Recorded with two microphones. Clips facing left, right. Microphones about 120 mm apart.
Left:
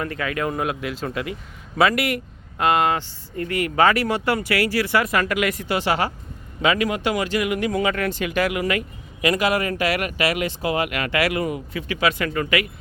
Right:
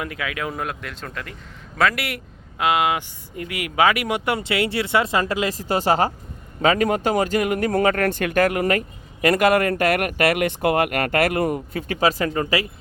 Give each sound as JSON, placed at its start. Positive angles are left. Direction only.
{"t": 0.0, "sound": "speech", "side_deg": -5}
{"t": 5.6, "sound": "speech", "side_deg": -40}